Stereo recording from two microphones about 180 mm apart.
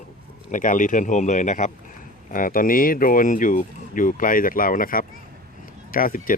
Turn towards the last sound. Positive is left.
turn(degrees=50)  # may be behind; listen again after turning